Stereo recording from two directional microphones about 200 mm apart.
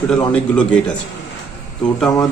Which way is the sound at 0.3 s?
5° left (ahead or behind).